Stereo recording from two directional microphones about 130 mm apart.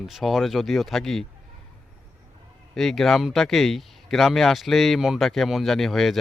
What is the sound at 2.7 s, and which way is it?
Speech, 5° left (ahead or behind).